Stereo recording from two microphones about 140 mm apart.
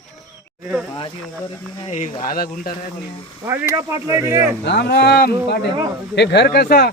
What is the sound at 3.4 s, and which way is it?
Speech, 15° right (ahead or behind).